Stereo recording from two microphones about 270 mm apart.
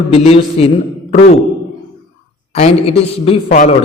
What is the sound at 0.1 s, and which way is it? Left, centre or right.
Speech, left.